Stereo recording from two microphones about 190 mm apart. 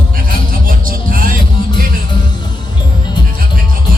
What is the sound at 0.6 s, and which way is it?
Music, 45° right (ahead or behind).